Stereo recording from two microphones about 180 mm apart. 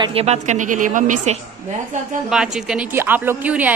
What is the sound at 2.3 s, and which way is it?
A woman's voice, 5° right (ahead or behind).